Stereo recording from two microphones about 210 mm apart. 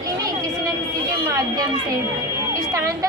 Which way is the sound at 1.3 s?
15° right (ahead or behind).